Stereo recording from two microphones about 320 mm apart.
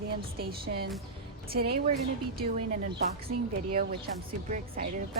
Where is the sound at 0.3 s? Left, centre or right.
Right.